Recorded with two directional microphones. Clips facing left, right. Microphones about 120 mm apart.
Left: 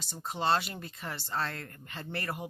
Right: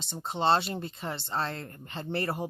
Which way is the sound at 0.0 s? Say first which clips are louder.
Right 4 dB; 25° right (ahead or behind).